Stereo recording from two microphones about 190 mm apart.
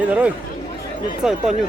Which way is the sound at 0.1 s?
5° right (ahead or behind).